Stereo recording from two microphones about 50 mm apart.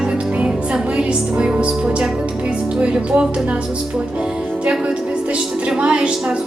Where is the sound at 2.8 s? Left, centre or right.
Centre.